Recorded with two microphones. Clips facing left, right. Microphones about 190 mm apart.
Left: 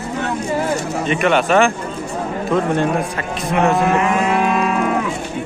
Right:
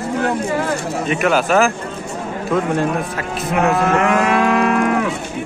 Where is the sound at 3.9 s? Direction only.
75° right (ahead or behind).